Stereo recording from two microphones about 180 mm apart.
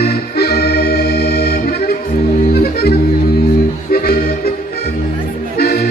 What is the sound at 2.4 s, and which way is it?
Music, 60° left (ahead or behind).